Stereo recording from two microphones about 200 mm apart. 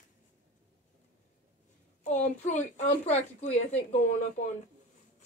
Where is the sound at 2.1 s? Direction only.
35° left (ahead or behind).